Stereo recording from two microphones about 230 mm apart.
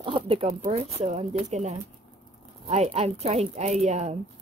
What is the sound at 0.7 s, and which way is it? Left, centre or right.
Speech, right.